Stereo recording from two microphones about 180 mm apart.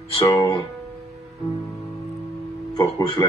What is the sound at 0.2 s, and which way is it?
Music, 20° left (ahead or behind).